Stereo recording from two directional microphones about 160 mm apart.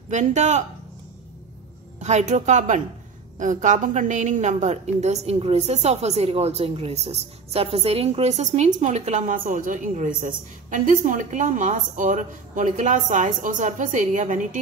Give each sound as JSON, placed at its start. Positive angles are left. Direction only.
{"t": 0.1, "sound": "a woman's voice", "side_deg": -50}
{"t": 2.0, "sound": "a woman's voice", "side_deg": -45}